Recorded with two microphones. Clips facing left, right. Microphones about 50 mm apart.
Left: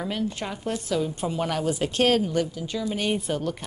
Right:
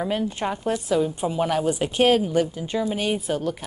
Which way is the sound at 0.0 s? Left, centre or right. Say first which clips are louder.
Right 4 dB; centre.